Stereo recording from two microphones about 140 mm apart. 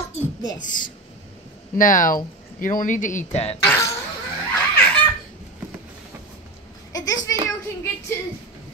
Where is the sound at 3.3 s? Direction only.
45° left (ahead or behind).